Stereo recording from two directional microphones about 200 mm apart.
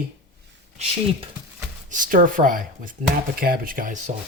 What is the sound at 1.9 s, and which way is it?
Speech, 45° right (ahead or behind).